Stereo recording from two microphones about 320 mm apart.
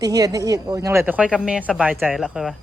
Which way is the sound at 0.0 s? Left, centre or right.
Centre.